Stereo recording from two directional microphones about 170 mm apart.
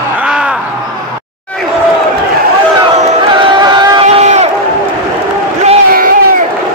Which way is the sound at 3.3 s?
25° right (ahead or behind).